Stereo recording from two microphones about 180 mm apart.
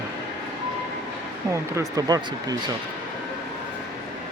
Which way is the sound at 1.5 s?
15° right (ahead or behind).